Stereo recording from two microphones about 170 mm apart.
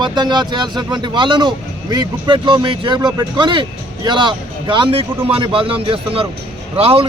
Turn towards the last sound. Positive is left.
turn(degrees=-35)  # may be behind; listen again after turning